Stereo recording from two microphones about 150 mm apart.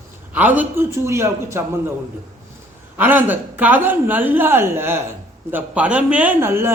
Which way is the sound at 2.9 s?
15° right (ahead or behind).